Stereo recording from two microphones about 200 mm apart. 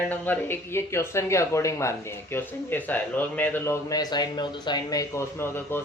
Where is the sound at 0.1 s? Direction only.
10° left (ahead or behind).